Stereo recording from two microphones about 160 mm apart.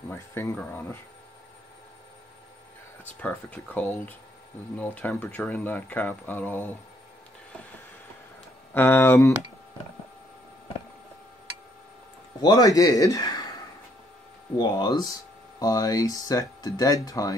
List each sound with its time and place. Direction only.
0.1 s speech: 15° left (ahead or behind)
3.2 s speech: 10° left (ahead or behind)
8.7 s speech: 15° left (ahead or behind)
12.4 s speech: 25° left (ahead or behind)
14.6 s speech: 25° left (ahead or behind)